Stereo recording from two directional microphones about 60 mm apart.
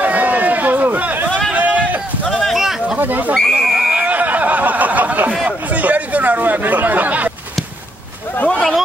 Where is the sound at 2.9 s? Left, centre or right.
Right.